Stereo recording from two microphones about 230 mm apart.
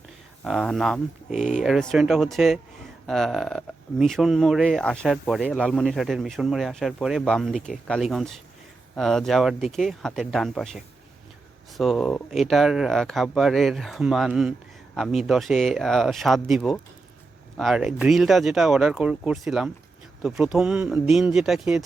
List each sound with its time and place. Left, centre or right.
0.4 s speech: centre
1.3 s speech: left
1.6 s speech: centre